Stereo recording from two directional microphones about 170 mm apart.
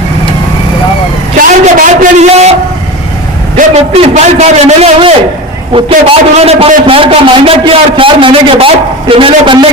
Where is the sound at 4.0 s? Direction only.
40° right (ahead or behind).